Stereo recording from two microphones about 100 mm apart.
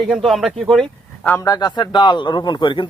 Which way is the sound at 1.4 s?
40° left (ahead or behind).